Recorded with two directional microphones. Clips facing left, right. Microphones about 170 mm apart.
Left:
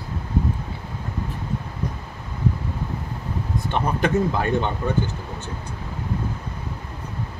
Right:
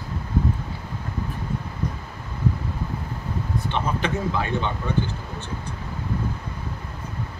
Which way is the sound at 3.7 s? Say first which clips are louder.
Left 4 dB; 50° left (ahead or behind).